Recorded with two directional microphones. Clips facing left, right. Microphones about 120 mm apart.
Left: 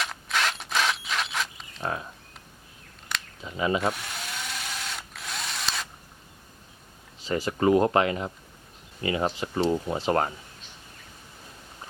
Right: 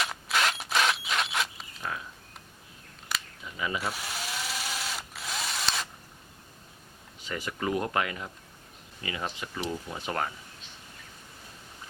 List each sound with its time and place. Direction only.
0.0 s a sound: centre (ahead or behind)
1.8 s speech: 40° left (ahead or behind)
3.4 s speech: 30° left (ahead or behind)
3.9 s drill: centre (ahead or behind)
7.3 s speech: 30° left (ahead or behind)